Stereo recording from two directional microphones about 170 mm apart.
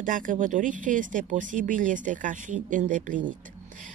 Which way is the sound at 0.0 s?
50° right (ahead or behind).